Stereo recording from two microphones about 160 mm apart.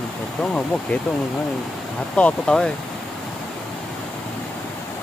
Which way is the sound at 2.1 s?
5° left (ahead or behind).